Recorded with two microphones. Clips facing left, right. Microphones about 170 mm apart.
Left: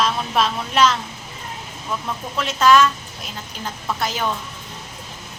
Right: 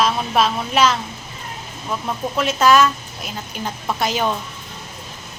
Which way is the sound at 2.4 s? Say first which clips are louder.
Even; 5° right (ahead or behind).